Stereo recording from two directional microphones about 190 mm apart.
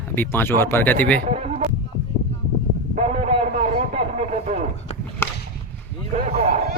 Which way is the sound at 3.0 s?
35° right (ahead or behind).